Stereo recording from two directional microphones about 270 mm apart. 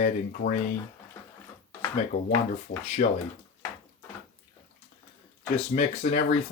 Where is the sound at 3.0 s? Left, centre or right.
Left.